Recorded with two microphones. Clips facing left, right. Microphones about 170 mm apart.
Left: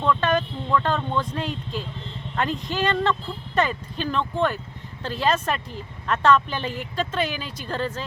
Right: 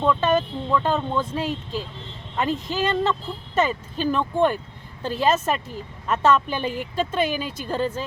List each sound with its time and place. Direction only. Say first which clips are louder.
0.0 s speech: right 2 dB; 10° right (ahead or behind)
2.7 s speech: left 1 dB; 5° right (ahead or behind)
7.3 s speech: right 5 dB; 45° right (ahead or behind)
7.7 s speech: right 3 dB; 10° right (ahead or behind)